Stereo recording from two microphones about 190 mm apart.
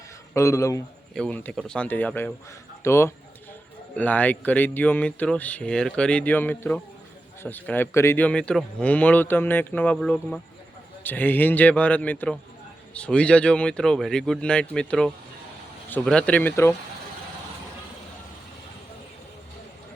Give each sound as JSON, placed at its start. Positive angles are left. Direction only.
{"t": 0.3, "sound": "speech", "side_deg": 15}
{"t": 1.1, "sound": "speech", "side_deg": 5}